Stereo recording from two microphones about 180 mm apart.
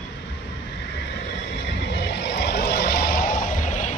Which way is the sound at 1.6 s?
70° left (ahead or behind).